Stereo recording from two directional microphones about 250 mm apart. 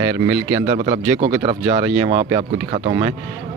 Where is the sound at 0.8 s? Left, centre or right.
Right.